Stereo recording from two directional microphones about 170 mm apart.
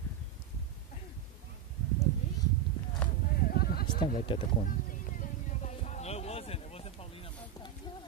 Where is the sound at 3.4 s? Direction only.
65° left (ahead or behind).